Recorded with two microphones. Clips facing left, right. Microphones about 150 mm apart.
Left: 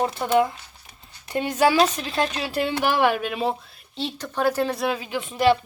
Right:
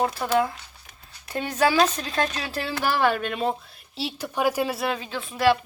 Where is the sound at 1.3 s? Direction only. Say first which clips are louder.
Left 3 dB; 15° left (ahead or behind).